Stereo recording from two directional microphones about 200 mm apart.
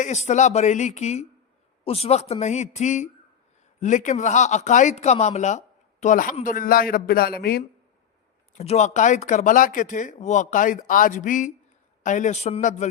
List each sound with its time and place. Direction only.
0.0 s speech: 35° left (ahead or behind)
8.5 s speech: 35° left (ahead or behind)